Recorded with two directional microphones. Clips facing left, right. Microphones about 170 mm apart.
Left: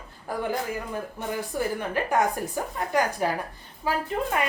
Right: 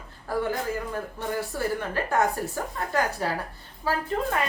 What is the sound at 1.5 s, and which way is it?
A woman's voice, 15° left (ahead or behind).